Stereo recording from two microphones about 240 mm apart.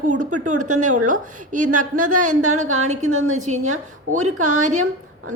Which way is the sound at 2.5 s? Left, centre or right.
Right.